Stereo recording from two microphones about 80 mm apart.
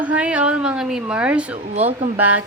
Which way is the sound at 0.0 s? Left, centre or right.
Centre.